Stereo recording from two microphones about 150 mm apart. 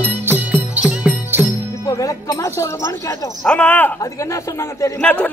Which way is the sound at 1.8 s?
20° left (ahead or behind).